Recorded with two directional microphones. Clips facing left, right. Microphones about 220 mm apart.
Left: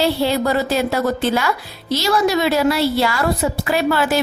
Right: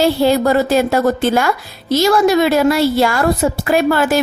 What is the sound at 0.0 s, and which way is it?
A woman's voice, 45° right (ahead or behind).